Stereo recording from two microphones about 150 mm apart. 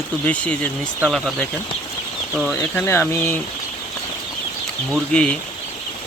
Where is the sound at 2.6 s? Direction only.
15° left (ahead or behind).